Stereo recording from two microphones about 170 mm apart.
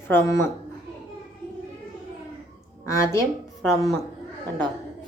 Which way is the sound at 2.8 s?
15° left (ahead or behind).